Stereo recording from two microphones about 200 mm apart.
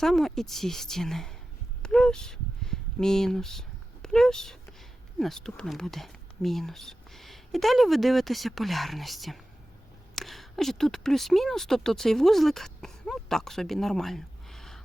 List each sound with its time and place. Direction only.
0.0 s speech: centre (ahead or behind)
1.8 s a sound: 5° left (ahead or behind)
5.2 s speech: 5° left (ahead or behind)